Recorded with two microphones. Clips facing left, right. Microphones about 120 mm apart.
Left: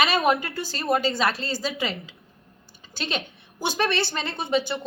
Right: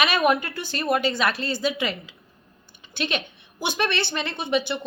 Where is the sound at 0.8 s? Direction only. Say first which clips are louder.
Even; 25° left (ahead or behind).